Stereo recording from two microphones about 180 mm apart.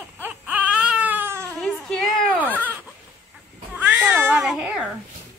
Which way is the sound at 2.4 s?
10° right (ahead or behind).